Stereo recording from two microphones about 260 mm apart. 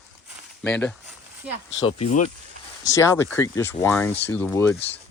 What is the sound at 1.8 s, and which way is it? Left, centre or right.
Speech, left.